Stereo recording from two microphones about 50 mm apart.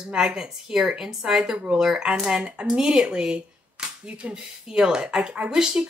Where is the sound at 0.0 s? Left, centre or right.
Centre.